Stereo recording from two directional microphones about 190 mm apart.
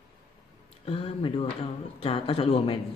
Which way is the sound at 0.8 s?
30° left (ahead or behind).